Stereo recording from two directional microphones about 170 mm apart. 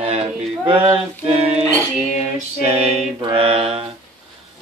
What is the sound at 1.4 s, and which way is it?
Mantra, 35° right (ahead or behind).